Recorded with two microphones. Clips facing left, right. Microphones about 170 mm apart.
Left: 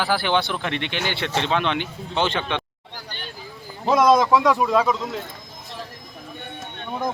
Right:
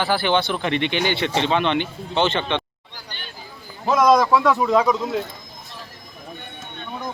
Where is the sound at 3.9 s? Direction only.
10° left (ahead or behind).